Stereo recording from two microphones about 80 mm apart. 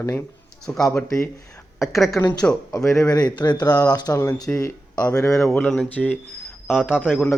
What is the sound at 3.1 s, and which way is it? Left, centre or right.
Speech, left.